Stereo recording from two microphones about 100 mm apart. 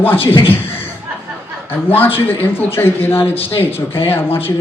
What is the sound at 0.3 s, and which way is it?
Speech, 20° left (ahead or behind).